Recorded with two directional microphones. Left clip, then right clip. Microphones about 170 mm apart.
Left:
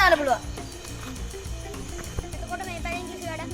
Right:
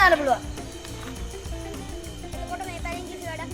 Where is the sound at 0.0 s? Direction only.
5° left (ahead or behind).